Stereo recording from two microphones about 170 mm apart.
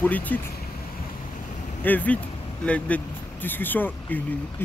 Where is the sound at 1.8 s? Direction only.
10° left (ahead or behind).